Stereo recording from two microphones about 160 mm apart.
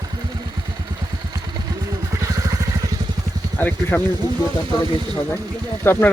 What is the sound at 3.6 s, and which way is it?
Speech, 10° left (ahead or behind).